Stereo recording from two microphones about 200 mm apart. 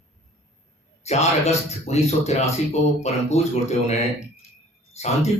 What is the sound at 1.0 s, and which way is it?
Speech, 35° left (ahead or behind).